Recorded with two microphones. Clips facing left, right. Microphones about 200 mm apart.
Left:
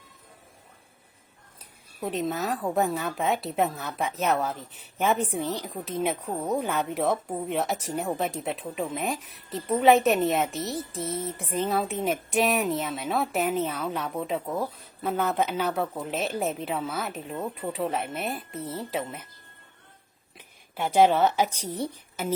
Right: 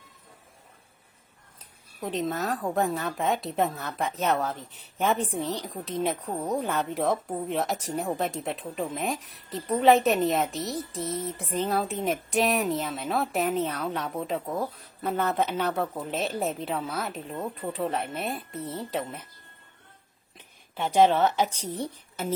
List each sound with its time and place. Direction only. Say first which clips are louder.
2.0 s a woman's voice: left 1 dB; 5° left (ahead or behind)
20.7 s a woman's voice: left 1 dB; 10° left (ahead or behind)